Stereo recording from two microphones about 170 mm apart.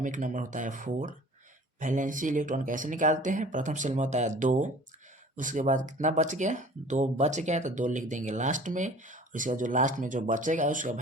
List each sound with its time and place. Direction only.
0.0 s speech: 50° right (ahead or behind)